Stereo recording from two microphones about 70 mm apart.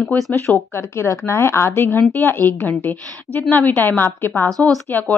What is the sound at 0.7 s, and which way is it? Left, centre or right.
A woman's voice, left.